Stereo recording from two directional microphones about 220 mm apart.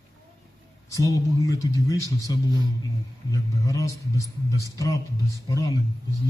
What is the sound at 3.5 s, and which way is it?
A man's voice, 15° left (ahead or behind).